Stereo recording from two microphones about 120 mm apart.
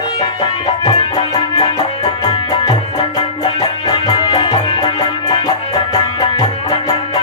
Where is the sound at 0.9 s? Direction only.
55° left (ahead or behind).